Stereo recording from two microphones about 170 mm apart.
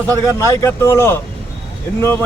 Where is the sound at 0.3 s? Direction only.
15° left (ahead or behind).